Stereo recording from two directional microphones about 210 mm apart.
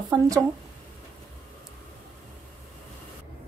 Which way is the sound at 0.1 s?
15° right (ahead or behind).